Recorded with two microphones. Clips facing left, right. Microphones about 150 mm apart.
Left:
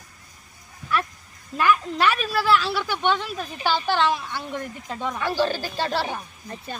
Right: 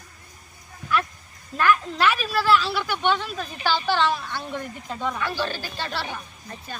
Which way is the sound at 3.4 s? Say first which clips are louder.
Left 1 dB; 15° left (ahead or behind).